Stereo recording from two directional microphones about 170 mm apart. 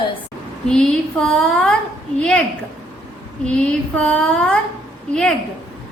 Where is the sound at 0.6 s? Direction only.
5° left (ahead or behind).